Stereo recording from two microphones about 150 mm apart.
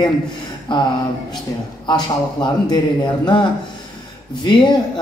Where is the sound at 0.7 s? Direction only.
30° left (ahead or behind).